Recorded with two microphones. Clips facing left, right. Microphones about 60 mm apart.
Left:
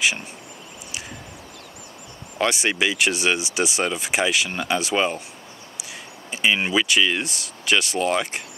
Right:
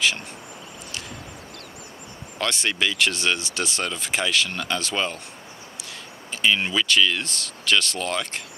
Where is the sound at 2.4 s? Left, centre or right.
Centre.